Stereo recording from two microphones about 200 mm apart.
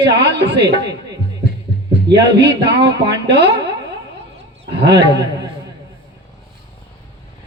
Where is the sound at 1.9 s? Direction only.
60° right (ahead or behind).